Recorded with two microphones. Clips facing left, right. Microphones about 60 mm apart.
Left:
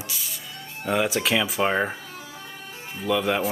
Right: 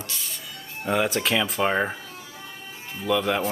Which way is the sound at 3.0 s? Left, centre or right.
Centre.